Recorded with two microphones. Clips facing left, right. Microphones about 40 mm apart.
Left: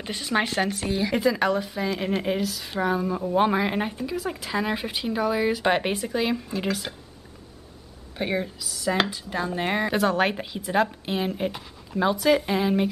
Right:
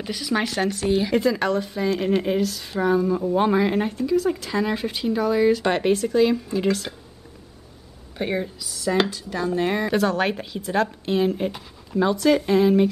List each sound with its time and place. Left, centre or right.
0.0 s speech: centre
0.8 s speech: centre
1.1 s speech: centre
8.2 s speech: centre